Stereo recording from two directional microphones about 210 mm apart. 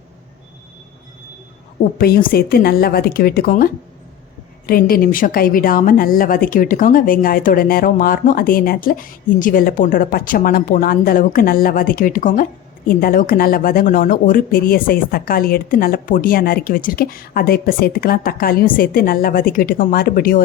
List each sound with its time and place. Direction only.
2.0 s a woman's voice: 45° left (ahead or behind)